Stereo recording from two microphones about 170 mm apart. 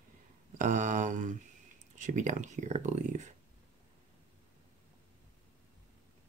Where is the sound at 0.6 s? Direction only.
50° right (ahead or behind).